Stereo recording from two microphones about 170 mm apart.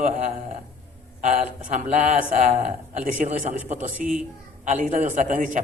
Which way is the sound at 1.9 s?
45° right (ahead or behind).